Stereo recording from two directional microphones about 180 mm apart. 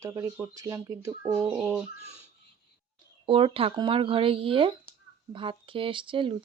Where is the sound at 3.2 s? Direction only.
30° right (ahead or behind).